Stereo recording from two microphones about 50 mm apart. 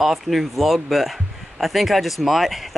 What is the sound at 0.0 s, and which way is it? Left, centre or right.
Speech, centre.